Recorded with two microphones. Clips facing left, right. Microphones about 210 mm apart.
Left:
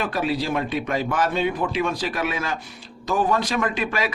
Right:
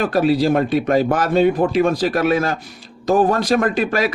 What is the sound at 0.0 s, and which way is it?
Speech, 40° right (ahead or behind).